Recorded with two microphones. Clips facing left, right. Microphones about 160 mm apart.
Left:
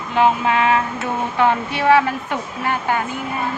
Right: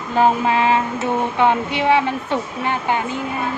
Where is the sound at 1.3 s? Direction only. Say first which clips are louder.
Left 2 dB; 20° right (ahead or behind).